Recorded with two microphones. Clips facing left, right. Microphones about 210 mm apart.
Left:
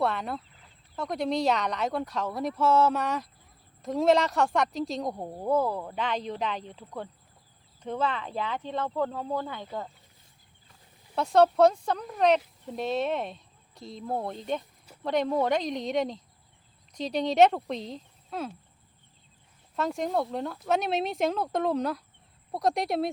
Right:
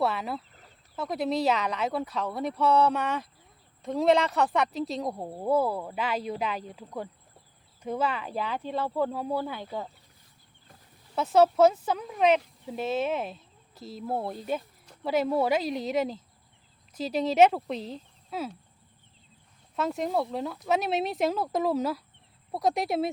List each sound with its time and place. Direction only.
0.0 s speech: 5° right (ahead or behind)
11.1 s speech: 5° right (ahead or behind)
19.7 s speech: centre (ahead or behind)